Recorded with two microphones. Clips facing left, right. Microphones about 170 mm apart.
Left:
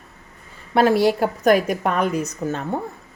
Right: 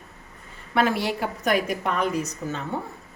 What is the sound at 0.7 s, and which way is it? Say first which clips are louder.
A woman's voice: left 7 dB; 35° left (ahead or behind).